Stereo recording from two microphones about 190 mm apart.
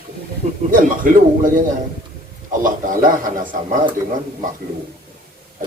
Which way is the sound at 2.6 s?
45° right (ahead or behind).